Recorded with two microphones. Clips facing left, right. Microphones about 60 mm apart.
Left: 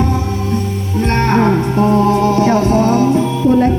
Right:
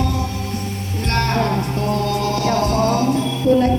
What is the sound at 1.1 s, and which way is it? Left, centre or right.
Music, left.